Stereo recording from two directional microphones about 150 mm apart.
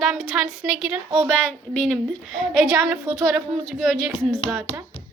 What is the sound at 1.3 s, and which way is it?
Speech, 5° left (ahead or behind).